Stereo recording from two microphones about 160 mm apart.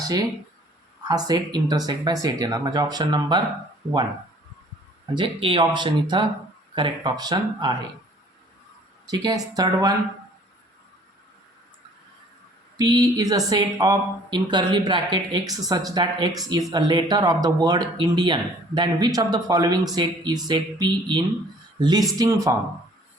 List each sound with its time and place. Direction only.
0.0 s speech: 25° right (ahead or behind)
5.1 s speech: 35° right (ahead or behind)
9.0 s speech: 25° right (ahead or behind)
12.7 s speech: 25° right (ahead or behind)